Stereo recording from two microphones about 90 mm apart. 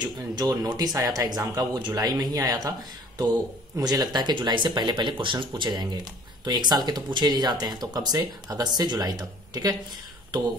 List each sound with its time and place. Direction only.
0.0 s speech: 45° right (ahead or behind)
3.7 s speech: 45° right (ahead or behind); by 5.5 s 65° right (ahead or behind)
5.6 s speech: 50° right (ahead or behind)